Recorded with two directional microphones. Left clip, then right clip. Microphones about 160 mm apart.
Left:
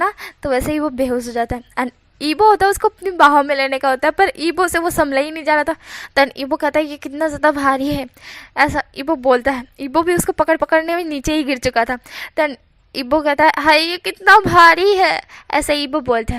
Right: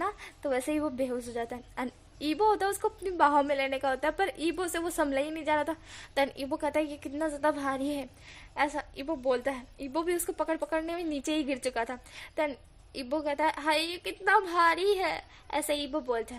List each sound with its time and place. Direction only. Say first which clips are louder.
0.0 s a woman's voice: left 14 dB; 30° left (ahead or behind)
13.0 s a woman's voice: left 16 dB; 40° left (ahead or behind)